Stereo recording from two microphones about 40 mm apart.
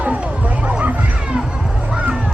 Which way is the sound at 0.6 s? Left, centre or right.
Right.